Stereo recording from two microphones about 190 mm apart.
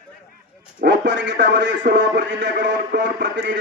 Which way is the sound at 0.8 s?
65° right (ahead or behind).